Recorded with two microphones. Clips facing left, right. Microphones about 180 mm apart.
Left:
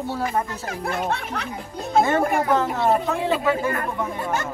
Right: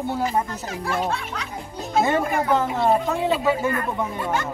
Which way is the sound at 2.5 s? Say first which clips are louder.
Right 3 dB; 15° right (ahead or behind).